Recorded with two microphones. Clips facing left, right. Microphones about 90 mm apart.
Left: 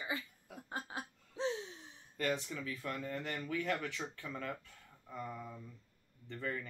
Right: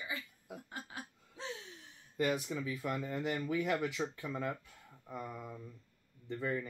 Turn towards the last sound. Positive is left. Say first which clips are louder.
# right 4 dB
turn(degrees=-15)  # may be behind; listen again after turning